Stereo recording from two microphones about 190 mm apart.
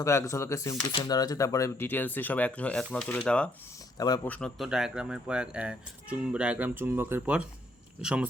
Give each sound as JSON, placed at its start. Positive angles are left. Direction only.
{"t": 0.0, "sound": "speech", "side_deg": 15}
{"t": 3.9, "sound": "a man's voice", "side_deg": 20}
{"t": 4.3, "sound": "speech", "side_deg": 5}